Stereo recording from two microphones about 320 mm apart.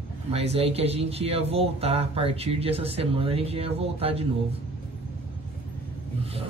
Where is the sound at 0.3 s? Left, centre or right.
Centre.